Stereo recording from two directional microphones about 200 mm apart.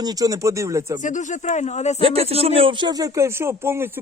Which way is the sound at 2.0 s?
30° right (ahead or behind).